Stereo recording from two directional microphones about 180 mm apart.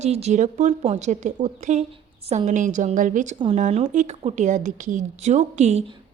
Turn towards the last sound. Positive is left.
turn(degrees=-35)  # may be behind; listen again after turning